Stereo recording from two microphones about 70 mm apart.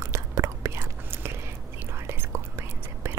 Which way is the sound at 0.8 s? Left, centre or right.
Right.